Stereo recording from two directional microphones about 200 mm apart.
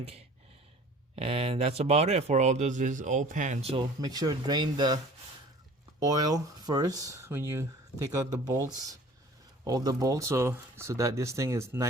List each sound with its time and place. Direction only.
1.1 s speech: 30° right (ahead or behind)
6.0 s speech: 20° right (ahead or behind)